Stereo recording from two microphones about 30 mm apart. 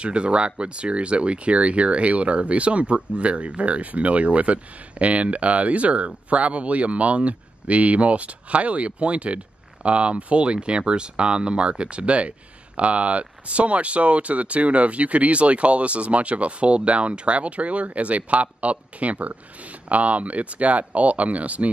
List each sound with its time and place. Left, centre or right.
0.0 s speech: right